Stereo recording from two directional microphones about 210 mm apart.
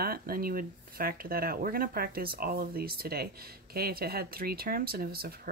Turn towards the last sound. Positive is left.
turn(degrees=-45)  # may be behind; listen again after turning